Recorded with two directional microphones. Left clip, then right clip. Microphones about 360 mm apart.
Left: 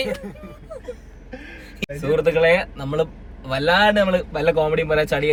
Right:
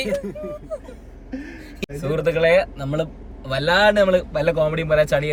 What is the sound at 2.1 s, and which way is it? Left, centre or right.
A man's voice, centre.